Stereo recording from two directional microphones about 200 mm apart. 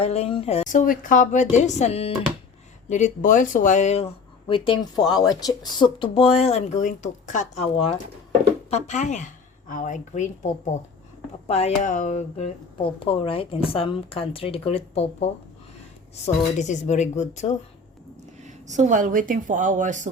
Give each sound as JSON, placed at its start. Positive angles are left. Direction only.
{"t": 0.0, "sound": "a woman's voice", "side_deg": 30}
{"t": 18.4, "sound": "speech", "side_deg": -35}